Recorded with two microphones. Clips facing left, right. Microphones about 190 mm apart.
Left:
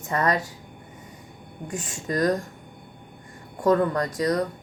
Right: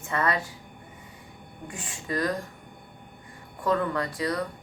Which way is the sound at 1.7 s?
40° left (ahead or behind).